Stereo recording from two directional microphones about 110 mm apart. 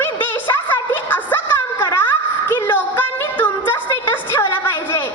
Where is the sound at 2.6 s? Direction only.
20° left (ahead or behind).